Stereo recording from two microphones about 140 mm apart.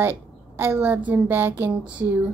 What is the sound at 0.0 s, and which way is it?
A woman's voice, 15° right (ahead or behind).